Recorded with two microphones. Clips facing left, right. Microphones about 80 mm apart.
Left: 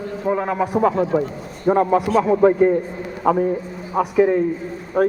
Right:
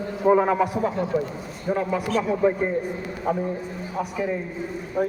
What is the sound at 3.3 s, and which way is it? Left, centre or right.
Speech, left.